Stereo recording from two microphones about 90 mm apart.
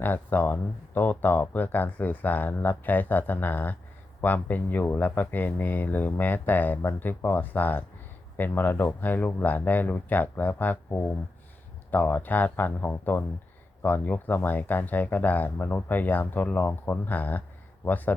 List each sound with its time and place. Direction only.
0.0 s speech: 20° left (ahead or behind)